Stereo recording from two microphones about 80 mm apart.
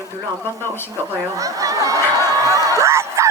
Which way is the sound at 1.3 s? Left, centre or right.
Right.